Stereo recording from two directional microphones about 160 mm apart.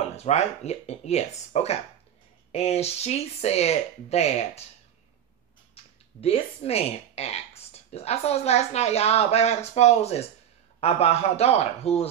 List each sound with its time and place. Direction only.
0.1 s speech: 45° left (ahead or behind)
5.8 s a sound: 40° left (ahead or behind)
6.2 s speech: 40° left (ahead or behind)